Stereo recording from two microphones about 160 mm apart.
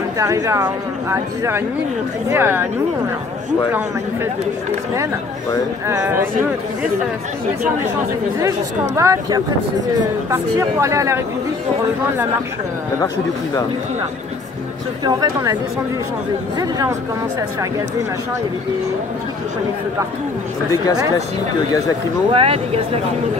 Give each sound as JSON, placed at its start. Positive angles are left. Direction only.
{"t": 0.2, "sound": "speech", "side_deg": -20}
{"t": 5.9, "sound": "speech", "side_deg": -15}
{"t": 8.4, "sound": "speech", "side_deg": -20}
{"t": 15.0, "sound": "speech", "side_deg": -25}
{"t": 16.5, "sound": "speech", "side_deg": -20}
{"t": 22.3, "sound": "speech", "side_deg": -35}